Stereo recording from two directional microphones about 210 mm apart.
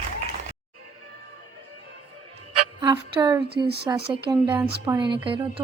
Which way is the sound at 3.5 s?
50° right (ahead or behind).